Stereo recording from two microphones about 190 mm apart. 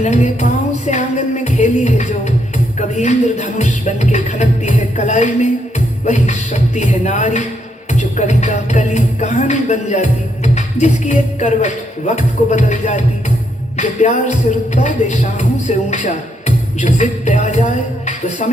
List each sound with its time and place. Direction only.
0.0 s speech: 35° left (ahead or behind)
0.9 s music: 40° left (ahead or behind)
2.7 s speech: 40° left (ahead or behind)